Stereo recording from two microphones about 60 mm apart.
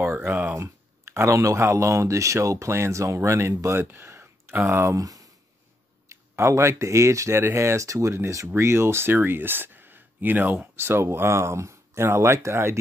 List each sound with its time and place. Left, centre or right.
0.0 s a sound: right
0.3 s speech: right
0.6 s speech: right
2.7 s speech: right
4.9 s speech: right
6.0 s speech: right
8.5 s speech: right
10.8 s speech: right